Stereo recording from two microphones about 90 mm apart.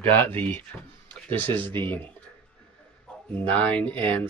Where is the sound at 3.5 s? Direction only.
15° left (ahead or behind).